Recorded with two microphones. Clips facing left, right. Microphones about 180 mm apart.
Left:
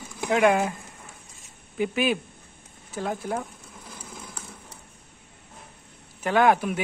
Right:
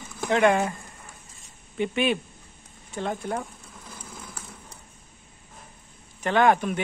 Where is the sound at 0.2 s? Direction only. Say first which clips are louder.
Even; 5° left (ahead or behind).